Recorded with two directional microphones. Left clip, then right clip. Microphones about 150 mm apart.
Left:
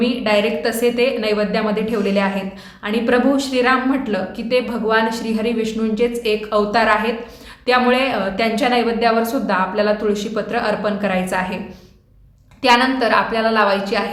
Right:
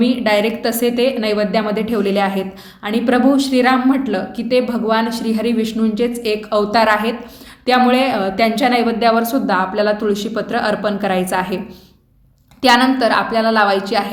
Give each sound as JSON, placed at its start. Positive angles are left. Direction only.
{"t": 0.0, "sound": "a woman's voice", "side_deg": -35}
{"t": 12.6, "sound": "a woman's voice", "side_deg": -30}